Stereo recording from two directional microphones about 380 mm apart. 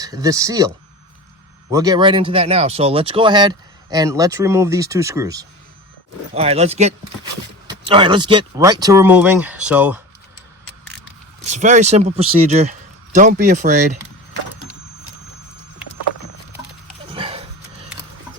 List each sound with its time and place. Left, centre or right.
0.0 s speech: centre
1.7 s speech: centre
11.4 s speech: centre
17.1 s a sound: centre